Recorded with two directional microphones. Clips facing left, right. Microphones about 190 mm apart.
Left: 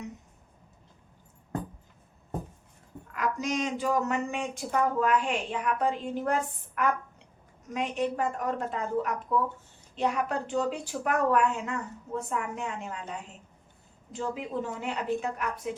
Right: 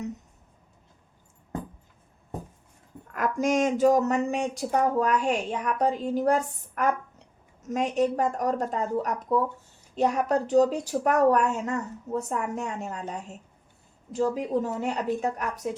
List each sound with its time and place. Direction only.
3.1 s speech: 50° right (ahead or behind)